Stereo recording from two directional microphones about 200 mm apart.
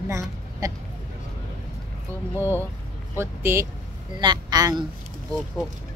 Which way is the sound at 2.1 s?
15° right (ahead or behind).